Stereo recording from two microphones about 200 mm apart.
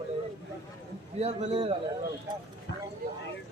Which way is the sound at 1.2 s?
30° right (ahead or behind).